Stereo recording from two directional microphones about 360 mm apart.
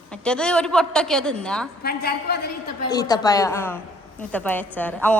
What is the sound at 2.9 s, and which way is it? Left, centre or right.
A woman's voice, centre.